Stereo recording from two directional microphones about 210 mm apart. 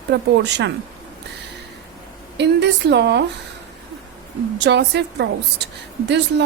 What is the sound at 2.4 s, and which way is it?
Speech, 55° right (ahead or behind).